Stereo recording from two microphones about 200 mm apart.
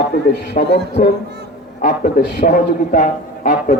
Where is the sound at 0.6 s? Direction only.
40° left (ahead or behind).